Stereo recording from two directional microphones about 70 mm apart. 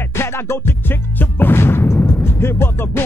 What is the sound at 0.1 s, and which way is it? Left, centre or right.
Music, left.